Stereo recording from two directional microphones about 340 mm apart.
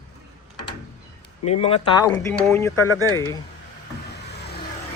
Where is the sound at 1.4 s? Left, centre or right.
Centre.